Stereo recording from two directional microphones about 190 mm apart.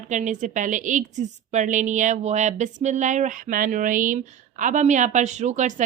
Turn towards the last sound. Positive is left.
turn(degrees=-40)  # may be behind; listen again after turning